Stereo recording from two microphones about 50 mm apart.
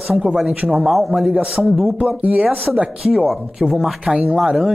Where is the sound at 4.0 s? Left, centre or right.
Right.